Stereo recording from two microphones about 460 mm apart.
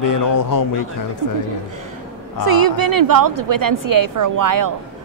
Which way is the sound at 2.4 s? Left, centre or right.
Right.